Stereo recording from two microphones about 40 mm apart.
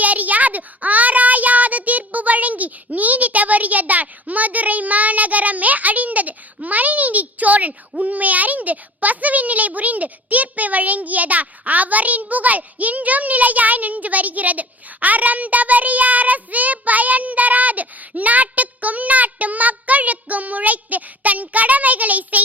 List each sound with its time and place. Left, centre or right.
0.0 s a child's voice: right